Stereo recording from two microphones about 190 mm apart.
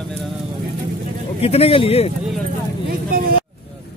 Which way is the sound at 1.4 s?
30° left (ahead or behind).